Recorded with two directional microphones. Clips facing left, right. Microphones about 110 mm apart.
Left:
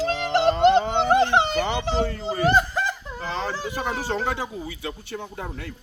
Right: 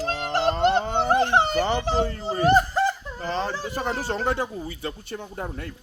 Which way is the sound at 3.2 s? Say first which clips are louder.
Right 1 dB; 45° right (ahead or behind).